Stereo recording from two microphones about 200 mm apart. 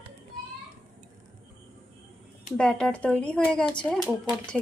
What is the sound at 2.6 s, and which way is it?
Speech, 5° left (ahead or behind).